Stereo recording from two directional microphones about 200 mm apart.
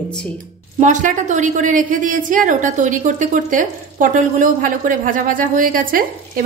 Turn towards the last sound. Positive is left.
turn(degrees=-45)  # may be behind; listen again after turning